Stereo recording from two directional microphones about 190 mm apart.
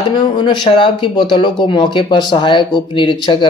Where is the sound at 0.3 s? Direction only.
25° left (ahead or behind).